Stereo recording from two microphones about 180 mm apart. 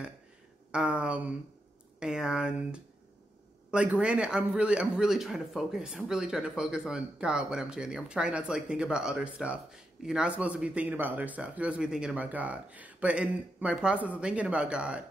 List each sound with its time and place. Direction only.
0.7 s speech: 5° right (ahead or behind)